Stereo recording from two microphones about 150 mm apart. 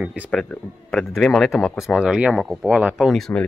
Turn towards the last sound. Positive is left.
turn(degrees=0)  # may be behind; listen again after turning